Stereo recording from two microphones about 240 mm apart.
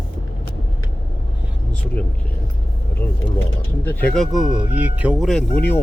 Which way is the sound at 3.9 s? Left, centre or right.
Centre.